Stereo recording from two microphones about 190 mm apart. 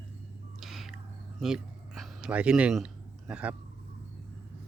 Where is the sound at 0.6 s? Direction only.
Centre (ahead or behind).